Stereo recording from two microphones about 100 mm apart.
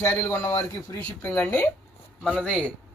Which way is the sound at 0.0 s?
25° left (ahead or behind).